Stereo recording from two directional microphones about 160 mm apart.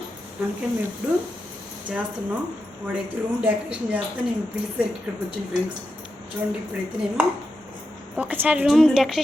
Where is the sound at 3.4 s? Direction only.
10° right (ahead or behind).